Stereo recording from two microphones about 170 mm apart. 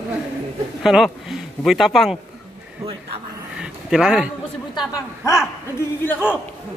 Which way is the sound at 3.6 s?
5° right (ahead or behind).